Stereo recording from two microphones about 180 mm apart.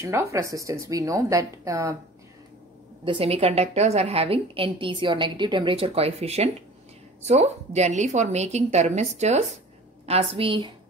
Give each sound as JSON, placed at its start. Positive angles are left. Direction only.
{"t": 0.0, "sound": "a woman's voice", "side_deg": -15}
{"t": 3.1, "sound": "a woman's voice", "side_deg": -30}